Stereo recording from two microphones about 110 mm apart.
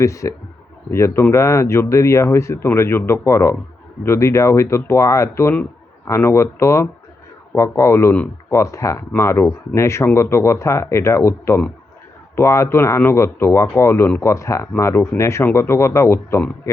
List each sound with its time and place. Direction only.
0.0 s speech: 30° left (ahead or behind)